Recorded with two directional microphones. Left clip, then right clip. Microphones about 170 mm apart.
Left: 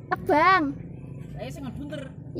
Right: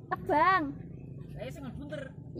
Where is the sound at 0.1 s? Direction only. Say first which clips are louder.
Left 6 dB; 50° left (ahead or behind).